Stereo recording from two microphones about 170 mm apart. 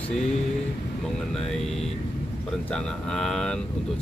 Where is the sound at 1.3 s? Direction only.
5° left (ahead or behind).